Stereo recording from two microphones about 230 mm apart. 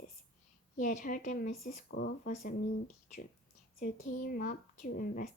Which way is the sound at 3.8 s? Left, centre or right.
Left.